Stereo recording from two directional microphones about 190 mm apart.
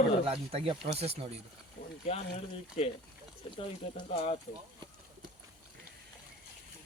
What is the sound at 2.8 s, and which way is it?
Speech, 35° left (ahead or behind).